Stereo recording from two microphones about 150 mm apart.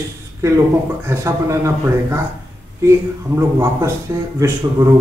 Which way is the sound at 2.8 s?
20° right (ahead or behind).